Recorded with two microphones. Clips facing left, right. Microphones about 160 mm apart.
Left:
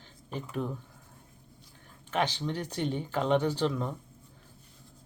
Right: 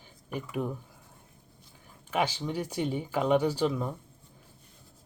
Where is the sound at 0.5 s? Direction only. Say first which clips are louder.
Right 1 dB; 10° right (ahead or behind).